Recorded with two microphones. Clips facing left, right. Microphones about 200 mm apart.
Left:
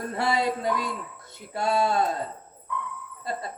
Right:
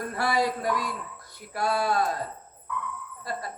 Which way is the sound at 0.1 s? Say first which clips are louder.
Left 1 dB; 25° left (ahead or behind).